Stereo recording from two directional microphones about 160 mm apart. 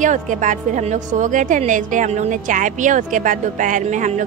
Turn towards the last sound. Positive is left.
turn(degrees=-50)  # may be behind; listen again after turning